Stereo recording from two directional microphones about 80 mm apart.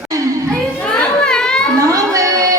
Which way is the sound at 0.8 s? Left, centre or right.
Centre.